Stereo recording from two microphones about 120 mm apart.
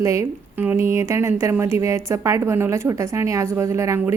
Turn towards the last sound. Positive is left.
turn(degrees=-25)  # may be behind; listen again after turning